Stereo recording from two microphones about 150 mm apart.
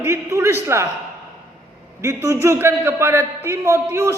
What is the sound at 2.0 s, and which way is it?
A man's voice, 20° right (ahead or behind).